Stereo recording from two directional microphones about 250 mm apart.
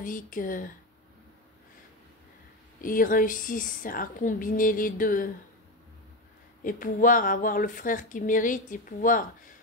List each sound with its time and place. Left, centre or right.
0.0 s speech: left
2.8 s speech: left
6.6 s speech: left